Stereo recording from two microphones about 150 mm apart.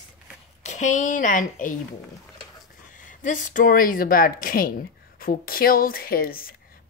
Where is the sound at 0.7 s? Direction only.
55° left (ahead or behind).